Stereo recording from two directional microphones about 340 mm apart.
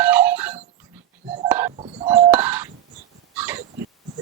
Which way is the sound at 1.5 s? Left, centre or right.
Centre.